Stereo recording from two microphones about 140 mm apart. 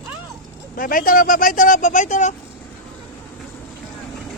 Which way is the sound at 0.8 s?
80° left.